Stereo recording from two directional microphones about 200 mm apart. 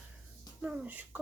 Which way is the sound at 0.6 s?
5° right (ahead or behind).